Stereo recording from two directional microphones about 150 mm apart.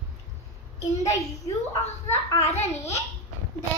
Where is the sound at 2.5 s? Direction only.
45° left (ahead or behind).